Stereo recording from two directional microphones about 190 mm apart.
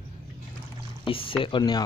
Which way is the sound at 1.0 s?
30° left (ahead or behind).